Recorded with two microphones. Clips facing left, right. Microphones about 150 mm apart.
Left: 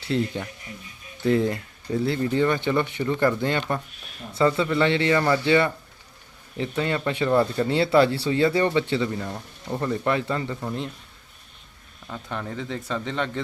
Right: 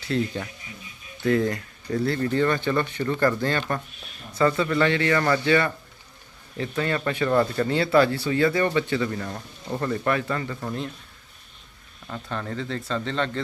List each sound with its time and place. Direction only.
0.1 s speech: 20° left (ahead or behind)
12.3 s speech: 10° left (ahead or behind)